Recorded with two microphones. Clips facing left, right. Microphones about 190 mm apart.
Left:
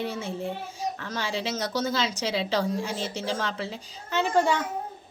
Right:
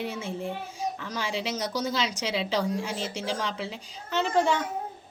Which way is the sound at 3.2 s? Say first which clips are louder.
Left 1 dB; centre (ahead or behind).